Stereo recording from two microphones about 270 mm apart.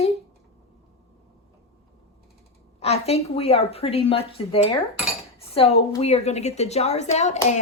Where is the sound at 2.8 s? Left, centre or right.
Left.